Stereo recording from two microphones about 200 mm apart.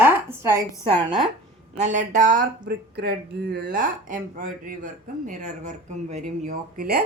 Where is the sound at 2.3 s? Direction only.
55° right (ahead or behind); by 6.8 s 35° right (ahead or behind).